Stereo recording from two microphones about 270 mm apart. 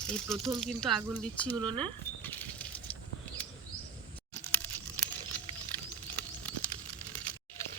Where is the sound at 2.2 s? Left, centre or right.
Centre.